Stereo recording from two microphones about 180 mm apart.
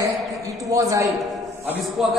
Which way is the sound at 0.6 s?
15° right (ahead or behind).